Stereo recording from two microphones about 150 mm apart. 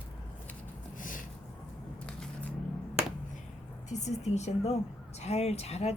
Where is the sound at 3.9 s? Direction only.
50° left (ahead or behind).